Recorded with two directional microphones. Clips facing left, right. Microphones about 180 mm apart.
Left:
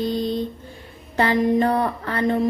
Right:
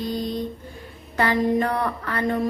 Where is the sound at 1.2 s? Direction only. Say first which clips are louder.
Left 2 dB; 25° left (ahead or behind).